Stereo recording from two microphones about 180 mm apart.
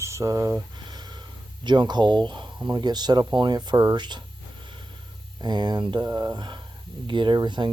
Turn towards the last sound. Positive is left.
turn(degrees=-25)  # may be behind; listen again after turning